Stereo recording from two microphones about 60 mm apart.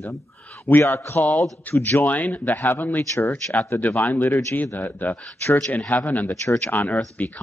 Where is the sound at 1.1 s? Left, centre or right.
Left.